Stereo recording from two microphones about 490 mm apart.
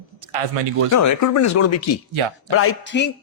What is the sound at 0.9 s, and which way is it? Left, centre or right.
Speech, left.